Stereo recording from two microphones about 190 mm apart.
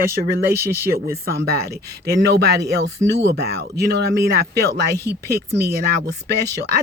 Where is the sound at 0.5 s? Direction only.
10° right (ahead or behind).